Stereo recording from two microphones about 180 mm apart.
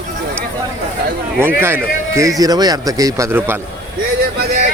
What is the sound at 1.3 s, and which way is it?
A man's voice, 15° right (ahead or behind).